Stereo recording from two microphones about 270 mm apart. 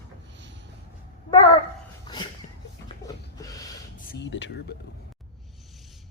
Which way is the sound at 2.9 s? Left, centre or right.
Centre.